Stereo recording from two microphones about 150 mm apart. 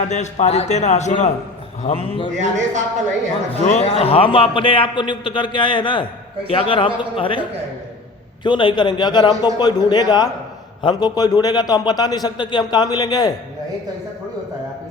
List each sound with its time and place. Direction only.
0.1 s a man's voice: 50° left (ahead or behind)
1.8 s a man's voice: 40° left (ahead or behind)
2.3 s speech: 55° right (ahead or behind)
3.7 s a man's voice: 45° left (ahead or behind)
8.4 s a man's voice: 30° left (ahead or behind)